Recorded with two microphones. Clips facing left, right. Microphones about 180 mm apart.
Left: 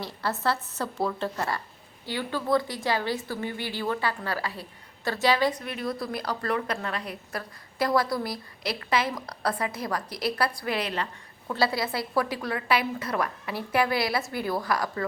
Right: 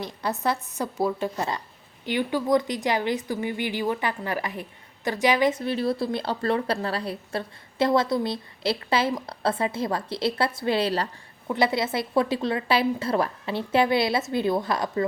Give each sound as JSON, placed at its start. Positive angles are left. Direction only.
{"t": 0.0, "sound": "a woman's voice", "side_deg": -15}
{"t": 11.4, "sound": "a woman's voice", "side_deg": -20}